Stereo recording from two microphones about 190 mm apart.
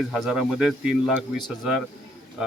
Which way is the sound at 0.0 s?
Centre (ahead or behind).